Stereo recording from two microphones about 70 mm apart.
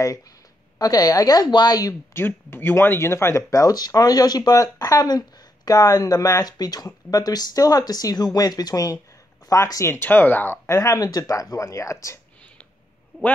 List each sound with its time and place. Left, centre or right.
0.0 s speech: left
2.1 s speech: left
9.5 s speech: left
9.8 s speech: left
10.7 s speech: left
11.0 s speech: left
11.5 s speech: left